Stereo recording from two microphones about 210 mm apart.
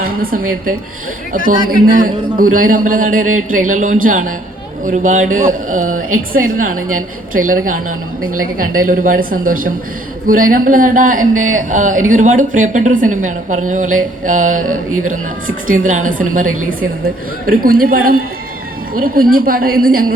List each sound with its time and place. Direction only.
0.0 s a woman's voice: 45° right (ahead or behind)